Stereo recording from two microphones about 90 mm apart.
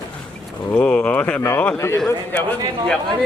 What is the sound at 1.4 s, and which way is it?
Speech, 35° left (ahead or behind).